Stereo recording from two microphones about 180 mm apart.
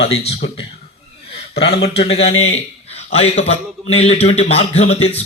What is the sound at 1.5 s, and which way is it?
Speech, 65° left (ahead or behind).